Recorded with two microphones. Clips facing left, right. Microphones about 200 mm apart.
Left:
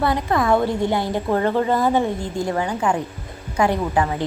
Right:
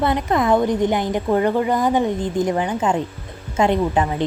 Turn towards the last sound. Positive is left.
turn(degrees=-20)  # may be behind; listen again after turning